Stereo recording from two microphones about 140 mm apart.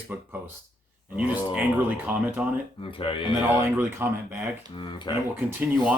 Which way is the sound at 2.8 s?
40° left (ahead or behind).